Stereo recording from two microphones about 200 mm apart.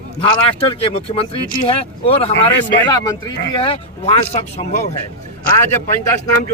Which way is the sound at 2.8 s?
20° left (ahead or behind).